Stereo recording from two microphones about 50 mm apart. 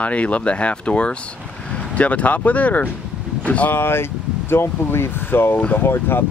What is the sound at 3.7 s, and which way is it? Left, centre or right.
Speech, left.